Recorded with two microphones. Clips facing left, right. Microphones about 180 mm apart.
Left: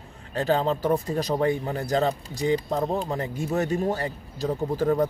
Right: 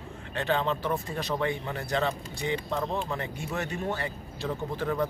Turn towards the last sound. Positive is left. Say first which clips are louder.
# left 6 dB
turn(degrees=40)  # may be behind; listen again after turning